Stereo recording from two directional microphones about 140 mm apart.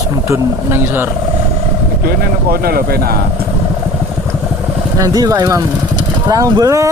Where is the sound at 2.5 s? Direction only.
90° right.